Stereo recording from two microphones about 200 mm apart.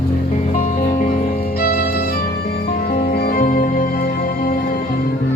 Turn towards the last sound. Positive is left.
turn(degrees=45)  # may be behind; listen again after turning